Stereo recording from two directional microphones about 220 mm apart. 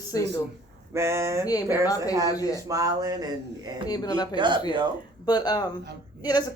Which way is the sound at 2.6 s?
15° right (ahead or behind).